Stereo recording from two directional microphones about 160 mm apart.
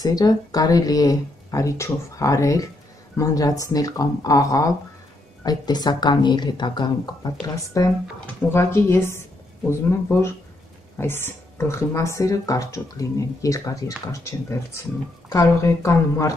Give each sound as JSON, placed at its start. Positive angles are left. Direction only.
{"t": 0.0, "sound": "a woman's voice", "side_deg": 25}